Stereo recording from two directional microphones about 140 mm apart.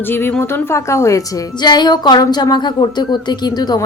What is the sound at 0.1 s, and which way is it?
A woman's voice, 15° left (ahead or behind).